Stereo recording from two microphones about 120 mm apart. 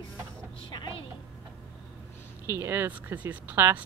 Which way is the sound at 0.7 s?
40° left (ahead or behind).